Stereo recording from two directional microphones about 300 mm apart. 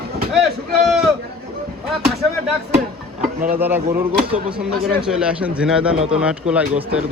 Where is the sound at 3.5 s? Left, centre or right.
Centre.